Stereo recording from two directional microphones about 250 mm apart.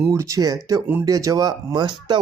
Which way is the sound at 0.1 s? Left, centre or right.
Centre.